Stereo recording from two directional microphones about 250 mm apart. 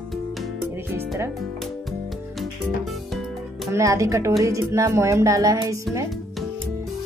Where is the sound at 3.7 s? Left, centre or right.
Centre.